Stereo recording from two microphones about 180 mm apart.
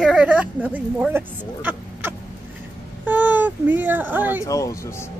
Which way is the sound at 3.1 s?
10° right (ahead or behind).